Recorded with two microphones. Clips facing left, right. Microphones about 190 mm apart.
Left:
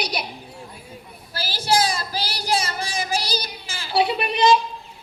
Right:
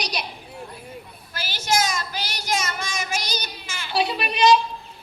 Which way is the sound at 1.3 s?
35° left (ahead or behind).